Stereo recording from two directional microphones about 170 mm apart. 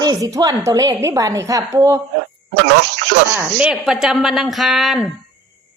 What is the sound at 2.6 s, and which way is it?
Speech, 90° right.